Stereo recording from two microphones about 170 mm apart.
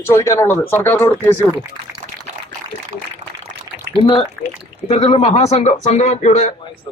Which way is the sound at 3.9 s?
30° left (ahead or behind).